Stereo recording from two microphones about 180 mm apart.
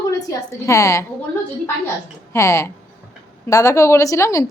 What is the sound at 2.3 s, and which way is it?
A woman's voice, 15° left (ahead or behind).